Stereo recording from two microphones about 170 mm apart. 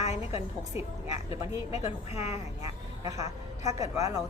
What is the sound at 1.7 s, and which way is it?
Speech, 40° left (ahead or behind).